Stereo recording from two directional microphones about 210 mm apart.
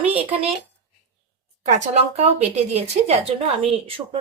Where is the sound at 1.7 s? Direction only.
30° right (ahead or behind).